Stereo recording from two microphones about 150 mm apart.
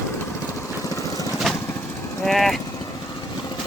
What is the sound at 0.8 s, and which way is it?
Lawn mower, 25° left (ahead or behind).